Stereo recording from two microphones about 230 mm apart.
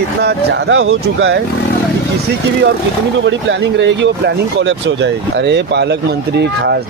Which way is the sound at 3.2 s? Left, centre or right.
Right.